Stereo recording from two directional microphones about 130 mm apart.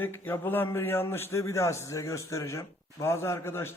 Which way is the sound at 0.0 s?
15° left (ahead or behind).